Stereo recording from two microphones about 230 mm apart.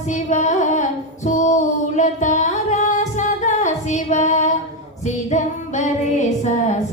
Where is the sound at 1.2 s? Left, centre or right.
Left.